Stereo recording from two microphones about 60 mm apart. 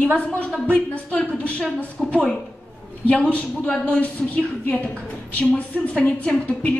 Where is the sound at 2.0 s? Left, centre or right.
Centre.